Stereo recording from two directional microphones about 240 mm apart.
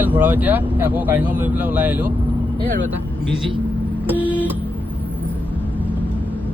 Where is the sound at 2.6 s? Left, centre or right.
Right.